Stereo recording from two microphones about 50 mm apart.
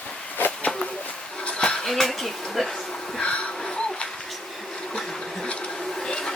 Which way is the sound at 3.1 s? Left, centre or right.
Left.